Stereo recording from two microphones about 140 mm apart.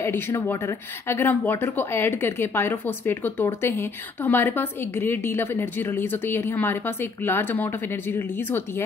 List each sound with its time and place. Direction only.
0.0 s speech: 20° left (ahead or behind)